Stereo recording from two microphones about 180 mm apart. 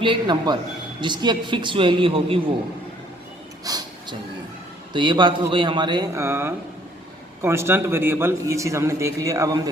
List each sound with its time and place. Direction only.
0.0 s speech: 25° right (ahead or behind)
3.6 s a sound: 20° right (ahead or behind)
4.9 s a man's voice: 25° right (ahead or behind)